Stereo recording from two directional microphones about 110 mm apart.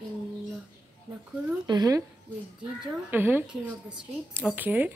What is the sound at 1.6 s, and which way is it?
Speech, 35° right (ahead or behind).